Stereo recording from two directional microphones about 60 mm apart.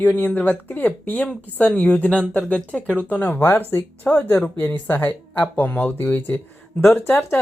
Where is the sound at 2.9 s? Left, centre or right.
Right.